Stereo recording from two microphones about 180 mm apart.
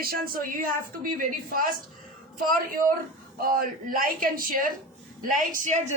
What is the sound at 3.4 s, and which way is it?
A man's voice, 50° right (ahead or behind).